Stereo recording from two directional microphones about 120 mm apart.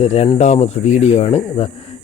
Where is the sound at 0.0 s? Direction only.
60° left (ahead or behind).